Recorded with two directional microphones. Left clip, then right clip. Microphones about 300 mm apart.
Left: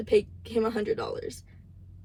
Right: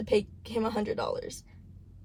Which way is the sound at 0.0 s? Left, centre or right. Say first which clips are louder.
Left 3 dB; centre.